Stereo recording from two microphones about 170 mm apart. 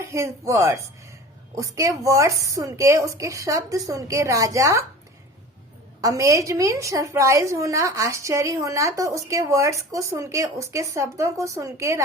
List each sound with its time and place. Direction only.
0.0 s a woman's voice: 15° right (ahead or behind)
6.0 s a woman's voice: 20° right (ahead or behind)